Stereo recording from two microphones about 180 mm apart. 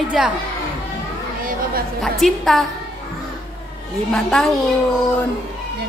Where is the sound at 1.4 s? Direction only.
55° right (ahead or behind).